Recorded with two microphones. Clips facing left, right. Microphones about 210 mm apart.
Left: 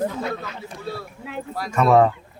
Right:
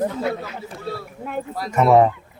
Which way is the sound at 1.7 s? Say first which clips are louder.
Right 1 dB; 20° right (ahead or behind).